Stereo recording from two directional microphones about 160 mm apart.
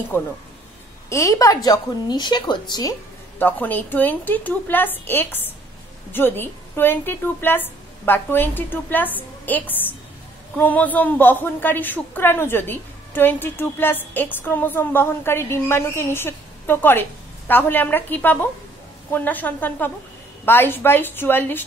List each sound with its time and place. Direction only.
0.1 s a woman's voice: 15° left (ahead or behind)
3.3 s a woman's voice: 10° left (ahead or behind)